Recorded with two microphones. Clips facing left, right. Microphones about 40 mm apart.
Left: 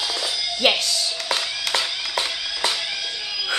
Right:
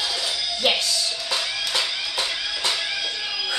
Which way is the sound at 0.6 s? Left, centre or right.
Left.